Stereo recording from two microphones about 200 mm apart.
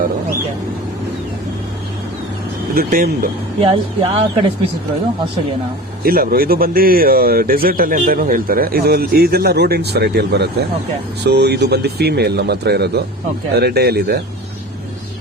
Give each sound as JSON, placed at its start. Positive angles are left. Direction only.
{"t": 2.7, "sound": "speech", "side_deg": -45}
{"t": 3.6, "sound": "speech", "side_deg": -25}
{"t": 6.0, "sound": "speech", "side_deg": -50}